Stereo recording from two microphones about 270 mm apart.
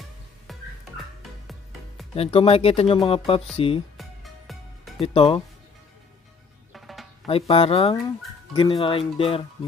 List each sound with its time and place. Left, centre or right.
0.5 s music: centre
2.1 s speech: left
3.9 s music: centre
5.0 s speech: left
6.7 s music: centre
7.2 s speech: left